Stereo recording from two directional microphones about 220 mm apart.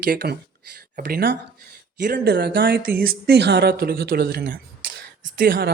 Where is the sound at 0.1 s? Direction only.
45° right (ahead or behind).